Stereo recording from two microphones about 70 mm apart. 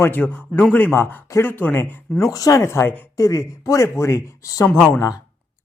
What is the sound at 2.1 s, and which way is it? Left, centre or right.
Speech, left.